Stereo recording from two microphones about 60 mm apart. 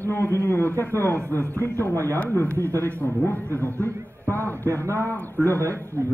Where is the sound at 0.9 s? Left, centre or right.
Right.